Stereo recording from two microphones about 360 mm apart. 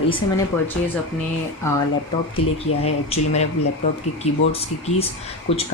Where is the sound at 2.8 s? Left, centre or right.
Centre.